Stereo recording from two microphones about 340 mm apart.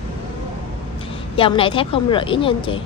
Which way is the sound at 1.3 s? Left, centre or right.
Centre.